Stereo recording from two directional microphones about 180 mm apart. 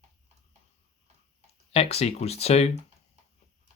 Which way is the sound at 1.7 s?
35° left (ahead or behind).